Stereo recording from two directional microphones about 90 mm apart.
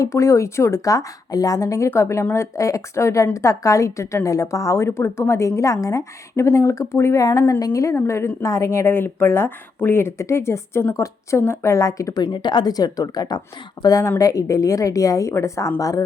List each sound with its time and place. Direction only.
0.0 s speech: 35° left (ahead or behind)